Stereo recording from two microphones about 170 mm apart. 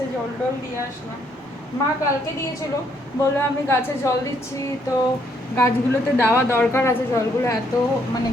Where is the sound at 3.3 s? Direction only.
15° left (ahead or behind).